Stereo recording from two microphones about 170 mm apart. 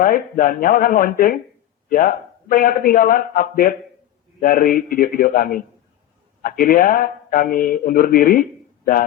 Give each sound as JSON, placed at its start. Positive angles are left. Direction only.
{"t": 0.0, "sound": "speech", "side_deg": 55}